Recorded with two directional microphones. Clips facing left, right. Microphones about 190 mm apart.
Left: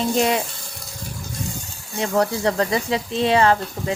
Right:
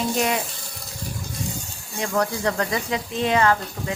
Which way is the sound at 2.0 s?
25° left (ahead or behind).